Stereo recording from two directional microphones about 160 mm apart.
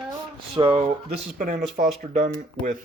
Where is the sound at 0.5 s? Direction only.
35° right (ahead or behind).